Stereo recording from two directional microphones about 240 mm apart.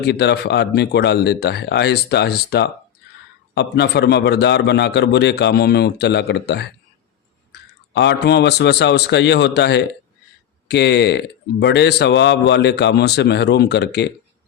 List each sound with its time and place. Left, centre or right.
0.0 s speech: left
7.9 s speech: left